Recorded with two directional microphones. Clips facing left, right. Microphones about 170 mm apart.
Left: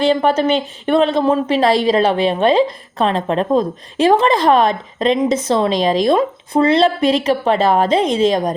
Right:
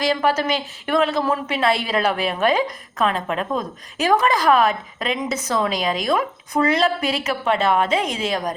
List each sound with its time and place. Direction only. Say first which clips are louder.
0.1 s a woman's voice: left 6 dB; 30° left (ahead or behind)